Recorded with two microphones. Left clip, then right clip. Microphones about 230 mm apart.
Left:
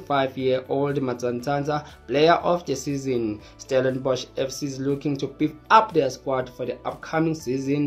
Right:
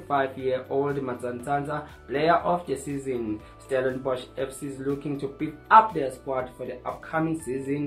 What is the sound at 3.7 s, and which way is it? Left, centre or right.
Speech, left.